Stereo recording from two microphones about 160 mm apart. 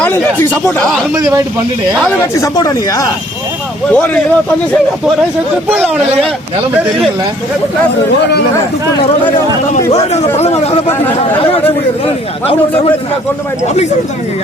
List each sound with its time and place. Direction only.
0.0 s speech: 10° left (ahead or behind)
1.1 s speech: 20° right (ahead or behind)
2.0 s speech: 5° left (ahead or behind)
2.4 s speech: 20° left (ahead or behind)
3.9 s speech: 5° left (ahead or behind)
5.7 s speech: 10° right (ahead or behind)
9.9 s speech: 40° left (ahead or behind)